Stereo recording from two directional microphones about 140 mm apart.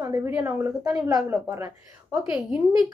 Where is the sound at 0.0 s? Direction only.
25° right (ahead or behind).